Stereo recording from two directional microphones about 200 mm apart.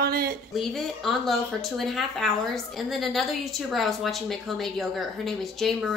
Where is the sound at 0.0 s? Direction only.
50° right (ahead or behind).